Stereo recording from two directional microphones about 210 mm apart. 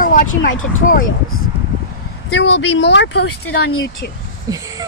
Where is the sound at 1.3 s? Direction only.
75° left (ahead or behind).